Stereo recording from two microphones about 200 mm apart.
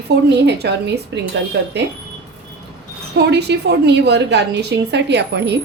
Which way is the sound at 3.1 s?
55° right (ahead or behind).